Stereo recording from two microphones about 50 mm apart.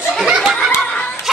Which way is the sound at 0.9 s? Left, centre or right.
Left.